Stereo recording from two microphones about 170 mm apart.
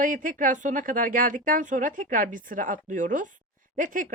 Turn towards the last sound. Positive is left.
turn(degrees=-50)  # may be behind; listen again after turning